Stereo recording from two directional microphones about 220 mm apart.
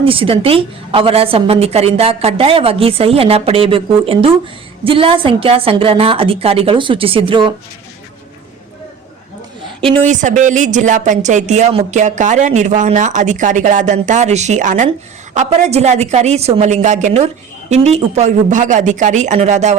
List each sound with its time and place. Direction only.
0.0 s a woman's voice: 25° right (ahead or behind)
9.8 s a woman's voice: 25° right (ahead or behind)